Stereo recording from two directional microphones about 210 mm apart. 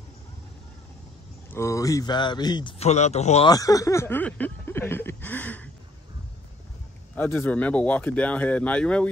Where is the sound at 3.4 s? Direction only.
15° left (ahead or behind).